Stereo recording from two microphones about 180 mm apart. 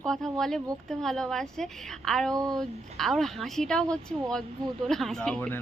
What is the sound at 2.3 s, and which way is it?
Speech, 20° right (ahead or behind).